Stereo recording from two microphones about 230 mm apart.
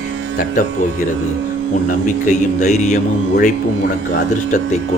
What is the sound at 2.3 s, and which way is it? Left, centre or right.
Speech, left.